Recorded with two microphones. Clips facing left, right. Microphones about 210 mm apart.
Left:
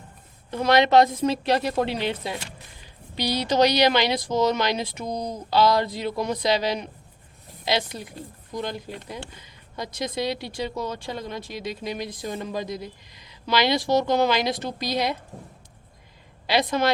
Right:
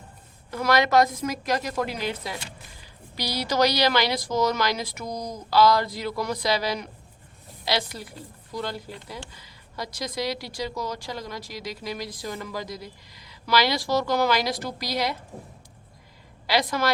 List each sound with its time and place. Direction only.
0.5 s speech: 25° left (ahead or behind)
16.5 s speech: 25° left (ahead or behind)